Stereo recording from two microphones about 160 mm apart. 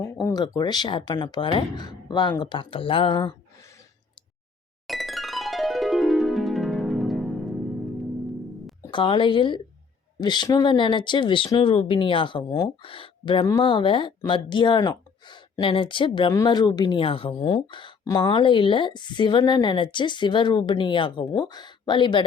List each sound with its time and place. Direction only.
0.0 s a woman's voice: 20° left (ahead or behind)
4.9 s music: centre (ahead or behind)
8.8 s a woman's voice: 30° left (ahead or behind)